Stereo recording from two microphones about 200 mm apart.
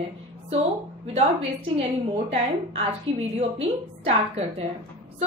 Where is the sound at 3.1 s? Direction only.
75° right (ahead or behind).